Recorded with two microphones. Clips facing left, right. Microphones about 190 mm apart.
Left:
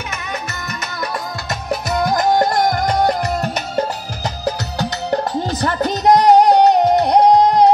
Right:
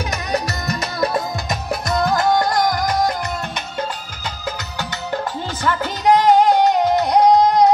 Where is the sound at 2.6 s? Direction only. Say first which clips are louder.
Left 2 dB; 55° left (ahead or behind).